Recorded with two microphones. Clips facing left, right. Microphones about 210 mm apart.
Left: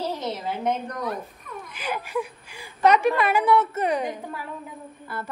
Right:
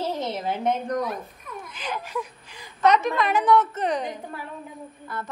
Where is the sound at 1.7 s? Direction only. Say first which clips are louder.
Left 3 dB; 10° left (ahead or behind).